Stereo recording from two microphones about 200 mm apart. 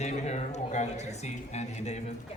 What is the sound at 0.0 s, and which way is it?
Speech, 35° left (ahead or behind).